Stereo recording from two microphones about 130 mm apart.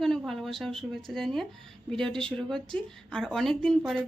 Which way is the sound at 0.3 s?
Centre (ahead or behind).